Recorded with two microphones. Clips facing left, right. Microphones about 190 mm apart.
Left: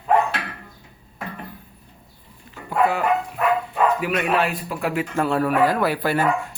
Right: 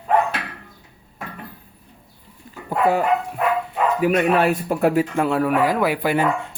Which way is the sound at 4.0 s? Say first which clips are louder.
Right 5 dB; 45° right (ahead or behind).